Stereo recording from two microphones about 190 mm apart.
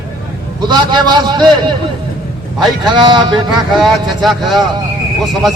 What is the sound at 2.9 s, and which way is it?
Speech, 25° right (ahead or behind).